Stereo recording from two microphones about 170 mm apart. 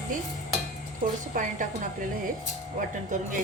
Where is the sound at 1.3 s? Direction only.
50° right (ahead or behind).